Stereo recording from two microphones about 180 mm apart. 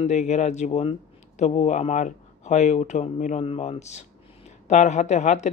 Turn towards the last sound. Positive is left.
turn(degrees=40)  # may be behind; listen again after turning